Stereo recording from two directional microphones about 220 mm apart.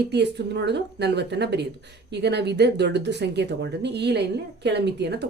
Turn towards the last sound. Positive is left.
turn(degrees=-50)  # may be behind; listen again after turning